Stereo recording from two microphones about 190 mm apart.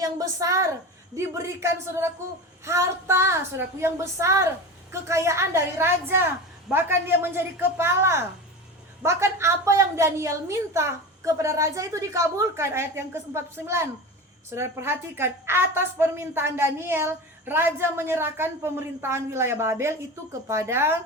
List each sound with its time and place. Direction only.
0.0 s a woman's voice: 20° right (ahead or behind)